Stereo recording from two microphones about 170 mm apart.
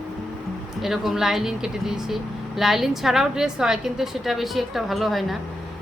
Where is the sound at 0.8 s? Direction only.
Centre (ahead or behind).